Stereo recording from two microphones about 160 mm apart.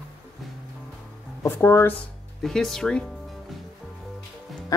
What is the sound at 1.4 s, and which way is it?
Speech, 15° left (ahead or behind).